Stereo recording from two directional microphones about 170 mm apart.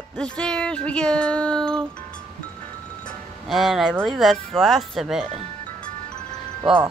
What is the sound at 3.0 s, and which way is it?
Music, centre (ahead or behind).